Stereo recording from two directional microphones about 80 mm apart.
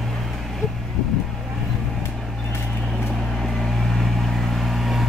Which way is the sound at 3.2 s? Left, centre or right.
Centre.